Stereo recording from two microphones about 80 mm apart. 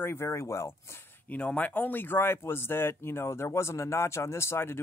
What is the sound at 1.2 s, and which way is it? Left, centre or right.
Speech, centre.